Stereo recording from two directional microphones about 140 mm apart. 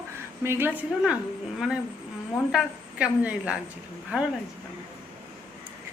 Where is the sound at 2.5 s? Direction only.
5° right (ahead or behind).